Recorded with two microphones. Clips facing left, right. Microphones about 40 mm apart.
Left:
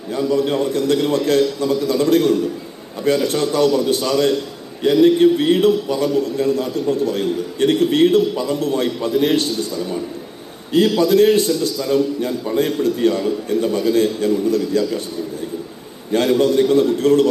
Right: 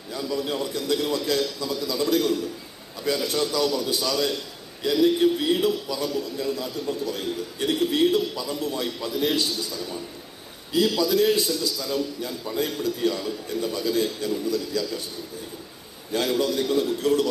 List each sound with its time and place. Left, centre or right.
0.1 s a man's voice: left
10.7 s a man's voice: left
16.1 s a man's voice: left